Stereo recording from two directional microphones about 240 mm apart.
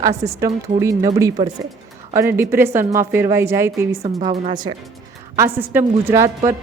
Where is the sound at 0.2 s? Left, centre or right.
Centre.